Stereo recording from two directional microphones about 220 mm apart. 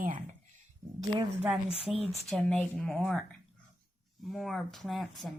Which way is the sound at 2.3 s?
5° left (ahead or behind).